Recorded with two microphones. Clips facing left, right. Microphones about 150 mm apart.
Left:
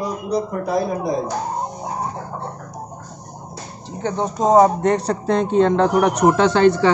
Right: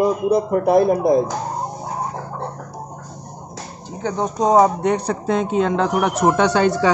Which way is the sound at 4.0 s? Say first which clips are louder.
Even; centre (ahead or behind).